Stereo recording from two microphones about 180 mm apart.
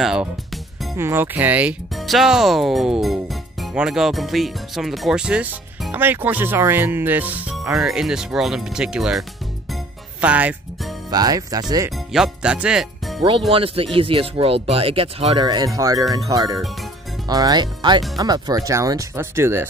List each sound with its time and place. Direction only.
0.0 s speech: 5° right (ahead or behind)
10.2 s speech: 10° right (ahead or behind)
11.1 s speech: 20° right (ahead or behind)
11.9 s speech: centre (ahead or behind)
13.5 s speech: 30° right (ahead or behind); by 19.6 s 15° right (ahead or behind)